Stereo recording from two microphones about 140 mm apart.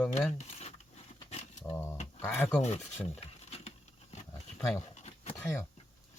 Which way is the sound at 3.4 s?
50° left (ahead or behind).